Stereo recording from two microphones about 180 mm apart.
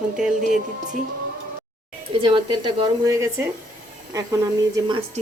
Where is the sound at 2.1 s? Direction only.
30° right (ahead or behind).